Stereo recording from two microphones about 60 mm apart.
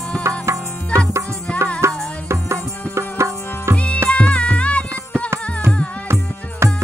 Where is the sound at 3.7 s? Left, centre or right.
Left.